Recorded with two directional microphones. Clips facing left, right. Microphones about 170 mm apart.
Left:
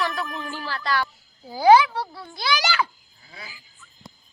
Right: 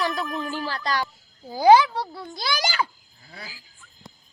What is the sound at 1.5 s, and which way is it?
Speech, 15° right (ahead or behind).